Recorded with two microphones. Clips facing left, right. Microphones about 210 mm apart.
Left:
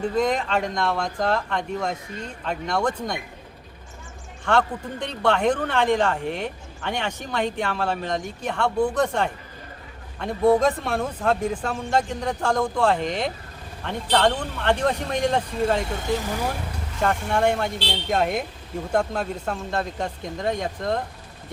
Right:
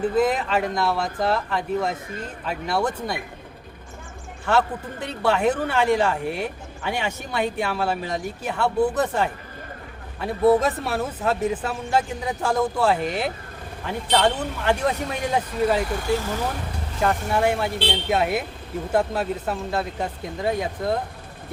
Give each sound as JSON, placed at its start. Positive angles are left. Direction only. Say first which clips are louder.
{"t": 0.0, "sound": "speech", "louder": "right 2 dB", "side_deg": -5}
{"t": 4.4, "sound": "a man's voice", "louder": "even", "side_deg": -5}
{"t": 15.9, "sound": "speech", "louder": "right 2 dB", "side_deg": 20}
{"t": 17.0, "sound": "speech", "louder": "even", "side_deg": -5}